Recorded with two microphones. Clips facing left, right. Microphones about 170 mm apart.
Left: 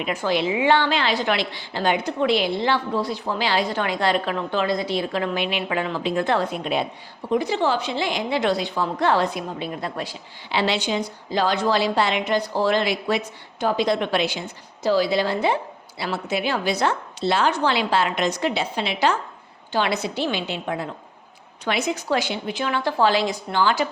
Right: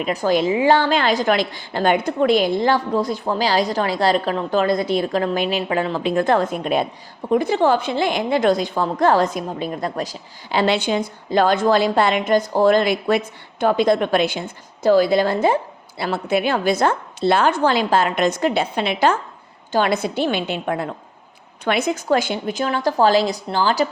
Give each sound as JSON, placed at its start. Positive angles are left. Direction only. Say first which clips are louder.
{"t": 0.0, "sound": "a woman's voice", "louder": "right 4 dB", "side_deg": -40}